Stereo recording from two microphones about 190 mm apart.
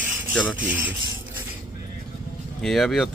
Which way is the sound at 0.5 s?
10° right (ahead or behind).